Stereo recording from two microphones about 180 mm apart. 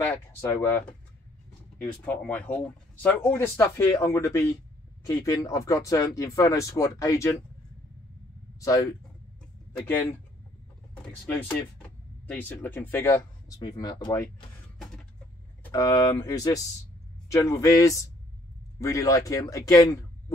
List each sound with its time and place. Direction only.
0.0 s speech: 15° left (ahead or behind)
2.0 s speech: 10° left (ahead or behind)
8.5 s speech: 20° left (ahead or behind)
12.3 s speech: 10° left (ahead or behind)
15.7 s a man's voice: 20° left (ahead or behind)